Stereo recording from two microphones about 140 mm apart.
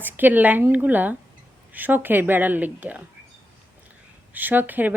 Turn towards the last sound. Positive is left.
turn(degrees=-10)  # may be behind; listen again after turning